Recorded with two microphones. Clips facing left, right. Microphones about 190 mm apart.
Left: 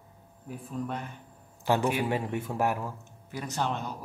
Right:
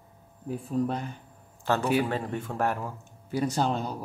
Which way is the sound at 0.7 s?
35° right (ahead or behind).